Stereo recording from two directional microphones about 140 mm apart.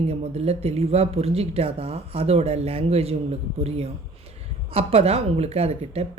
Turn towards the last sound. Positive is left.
turn(degrees=-50)  # may be behind; listen again after turning